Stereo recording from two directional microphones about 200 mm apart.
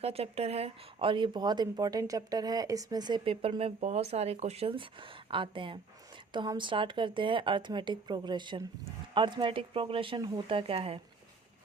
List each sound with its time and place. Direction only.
0.0 s speech: 30° right (ahead or behind)